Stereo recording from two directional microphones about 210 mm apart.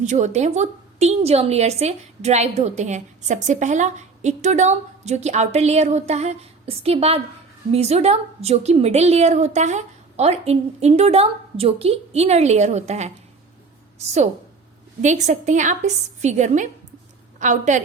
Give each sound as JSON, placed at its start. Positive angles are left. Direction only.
{"t": 0.0, "sound": "a woman's voice", "side_deg": -35}
{"t": 15.0, "sound": "a woman's voice", "side_deg": -35}